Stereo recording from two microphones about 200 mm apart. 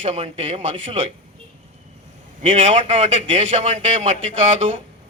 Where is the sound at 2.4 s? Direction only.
35° right (ahead or behind).